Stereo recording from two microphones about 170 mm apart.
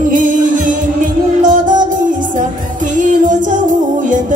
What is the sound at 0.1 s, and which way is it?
Music, 50° right (ahead or behind).